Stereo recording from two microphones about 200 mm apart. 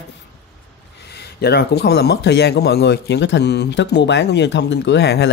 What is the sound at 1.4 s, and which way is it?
Speech, 55° left (ahead or behind).